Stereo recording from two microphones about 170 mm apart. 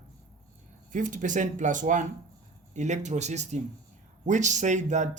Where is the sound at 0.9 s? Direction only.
50° right (ahead or behind).